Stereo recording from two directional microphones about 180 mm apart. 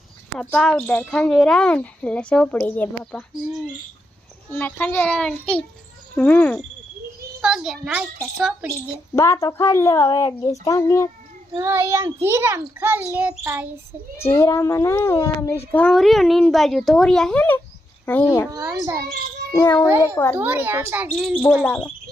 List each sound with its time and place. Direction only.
0.3 s speech: 5° left (ahead or behind)
9.1 s speech: 15° left (ahead or behind)
11.5 s a child's voice: 15° right (ahead or behind)
14.3 s a child's voice: 15° left (ahead or behind)
18.5 s a child's voice: 20° right (ahead or behind)
19.5 s speech: 15° left (ahead or behind)
19.9 s a child's voice: 15° right (ahead or behind)
20.1 s speech: 10° left (ahead or behind)
20.4 s a child's voice: 10° right (ahead or behind)